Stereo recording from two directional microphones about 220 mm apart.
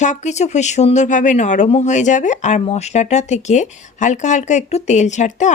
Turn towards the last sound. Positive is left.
turn(degrees=35)  # may be behind; listen again after turning